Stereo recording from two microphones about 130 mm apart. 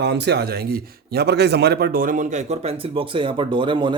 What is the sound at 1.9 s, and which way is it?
Speech, 90° right.